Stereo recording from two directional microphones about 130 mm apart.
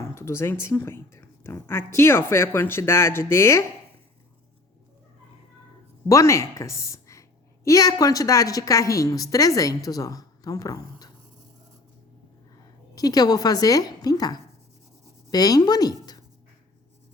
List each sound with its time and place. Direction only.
0.1 s speech: 20° left (ahead or behind)
6.1 s a woman's voice: 25° left (ahead or behind)
13.0 s speech: 30° left (ahead or behind)